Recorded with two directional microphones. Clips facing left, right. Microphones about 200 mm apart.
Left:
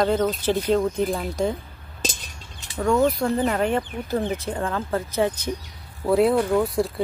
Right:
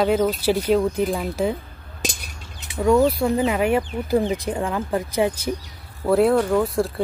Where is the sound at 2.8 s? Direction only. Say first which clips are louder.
Right 3 dB; 10° right (ahead or behind).